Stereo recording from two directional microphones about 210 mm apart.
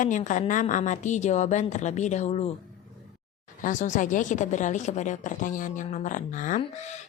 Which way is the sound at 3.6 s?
35° left (ahead or behind).